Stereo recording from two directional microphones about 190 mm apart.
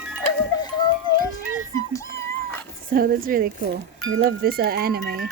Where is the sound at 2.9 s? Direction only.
50° right (ahead or behind).